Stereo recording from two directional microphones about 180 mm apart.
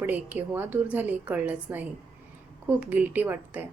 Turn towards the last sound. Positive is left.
turn(degrees=-10)  # may be behind; listen again after turning